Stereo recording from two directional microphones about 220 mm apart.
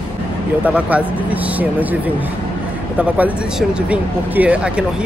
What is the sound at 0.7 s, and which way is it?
Speech, 5° right (ahead or behind).